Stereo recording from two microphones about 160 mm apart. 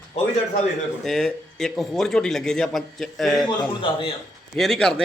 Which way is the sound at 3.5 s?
30° left (ahead or behind).